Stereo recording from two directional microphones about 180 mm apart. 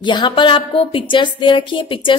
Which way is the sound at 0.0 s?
25° left (ahead or behind).